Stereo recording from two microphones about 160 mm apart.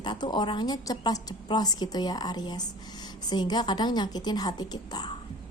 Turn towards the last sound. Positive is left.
turn(degrees=25)  # may be behind; listen again after turning